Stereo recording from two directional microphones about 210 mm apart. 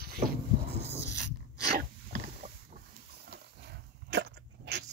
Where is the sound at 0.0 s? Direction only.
45° right (ahead or behind).